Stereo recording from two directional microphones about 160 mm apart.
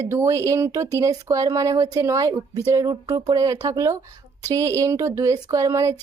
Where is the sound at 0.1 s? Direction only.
20° right (ahead or behind).